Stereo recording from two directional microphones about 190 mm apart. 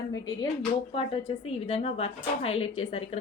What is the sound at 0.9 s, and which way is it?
A woman's voice, 30° left (ahead or behind).